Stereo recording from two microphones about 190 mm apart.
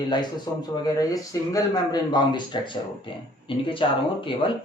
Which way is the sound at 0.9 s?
20° left (ahead or behind).